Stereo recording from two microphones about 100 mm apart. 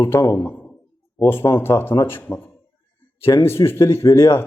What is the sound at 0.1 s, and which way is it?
A man's voice, 25° left (ahead or behind).